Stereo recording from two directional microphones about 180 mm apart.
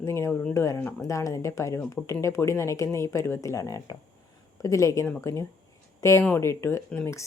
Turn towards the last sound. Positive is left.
turn(degrees=10)  # may be behind; listen again after turning